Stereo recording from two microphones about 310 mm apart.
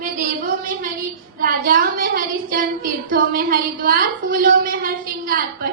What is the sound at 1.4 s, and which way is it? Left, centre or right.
A woman's voice, right.